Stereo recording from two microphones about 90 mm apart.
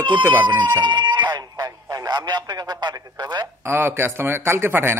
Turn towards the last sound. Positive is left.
turn(degrees=-25)  # may be behind; listen again after turning